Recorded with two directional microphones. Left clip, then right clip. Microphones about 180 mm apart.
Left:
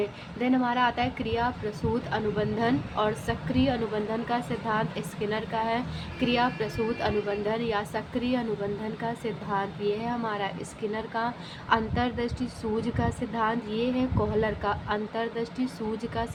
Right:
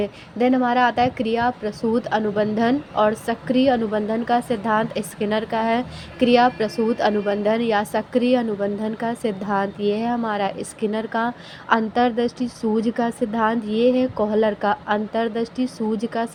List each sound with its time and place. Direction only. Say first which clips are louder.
0.0 s a woman's voice: right 8 dB; 40° right (ahead or behind)